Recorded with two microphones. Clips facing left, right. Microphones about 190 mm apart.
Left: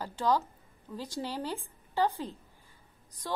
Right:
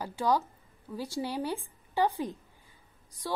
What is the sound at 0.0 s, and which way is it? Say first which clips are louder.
A woman's voice: right 1 dB; 10° right (ahead or behind).